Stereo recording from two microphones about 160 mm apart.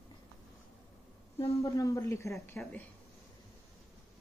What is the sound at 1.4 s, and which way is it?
Speech, 20° left (ahead or behind).